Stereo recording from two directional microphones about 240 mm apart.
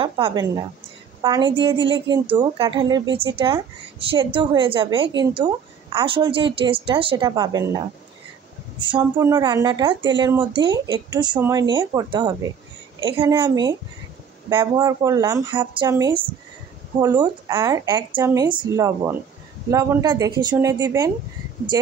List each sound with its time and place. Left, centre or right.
0.0 s a woman's voice: centre